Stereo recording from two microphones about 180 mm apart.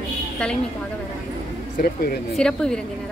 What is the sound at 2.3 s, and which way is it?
Speech, 5° left (ahead or behind).